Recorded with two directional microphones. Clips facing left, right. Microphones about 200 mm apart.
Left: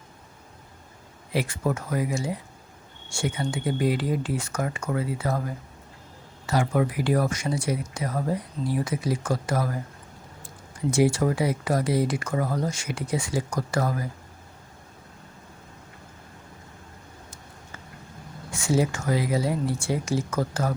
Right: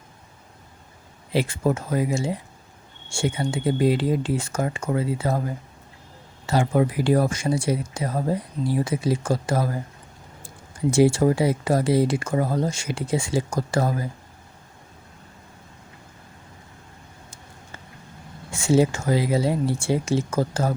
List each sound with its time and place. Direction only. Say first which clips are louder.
1.3 s speech: right 4 dB; 25° right (ahead or behind)
10.9 s speech: right 4 dB; 30° right (ahead or behind)
18.5 s speech: right 5 dB; 25° right (ahead or behind)